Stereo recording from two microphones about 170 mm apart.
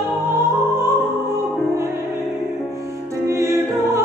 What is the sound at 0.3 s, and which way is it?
Music, 15° right (ahead or behind).